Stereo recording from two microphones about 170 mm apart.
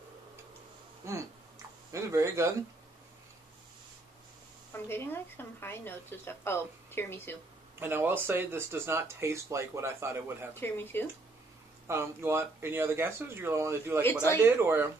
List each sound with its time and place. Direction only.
1.0 s a sound: 15° right (ahead or behind)
1.9 s speech: 15° right (ahead or behind)
4.7 s speech: 15° left (ahead or behind)
7.8 s speech: 10° right (ahead or behind)
10.5 s speech: 10° left (ahead or behind)
11.9 s speech: 15° right (ahead or behind)